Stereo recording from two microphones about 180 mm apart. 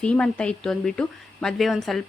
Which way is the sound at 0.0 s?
5° left (ahead or behind).